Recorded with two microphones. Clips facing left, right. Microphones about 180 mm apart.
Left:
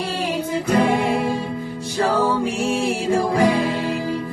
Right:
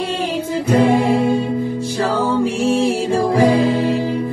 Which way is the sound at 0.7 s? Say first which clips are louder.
Right 5 dB; 30° right (ahead or behind).